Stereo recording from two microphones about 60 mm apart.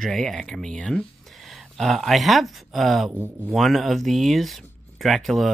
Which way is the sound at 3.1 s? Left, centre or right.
Right.